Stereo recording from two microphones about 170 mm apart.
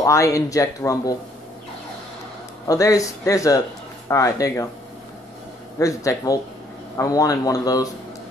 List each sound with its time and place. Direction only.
0.0 s speech: 20° left (ahead or behind)
2.6 s speech: 20° left (ahead or behind)
5.8 s speech: 20° left (ahead or behind)